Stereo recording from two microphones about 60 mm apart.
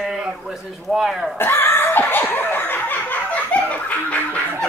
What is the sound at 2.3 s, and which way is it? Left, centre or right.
Snicker, left.